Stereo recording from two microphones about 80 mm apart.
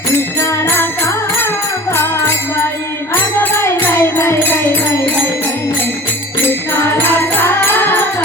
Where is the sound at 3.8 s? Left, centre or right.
Left.